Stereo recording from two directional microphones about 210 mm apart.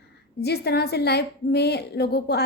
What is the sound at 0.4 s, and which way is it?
A woman's voice, 50° left (ahead or behind).